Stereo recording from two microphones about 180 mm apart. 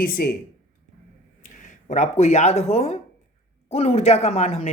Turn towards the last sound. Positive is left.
turn(degrees=35)  # may be behind; listen again after turning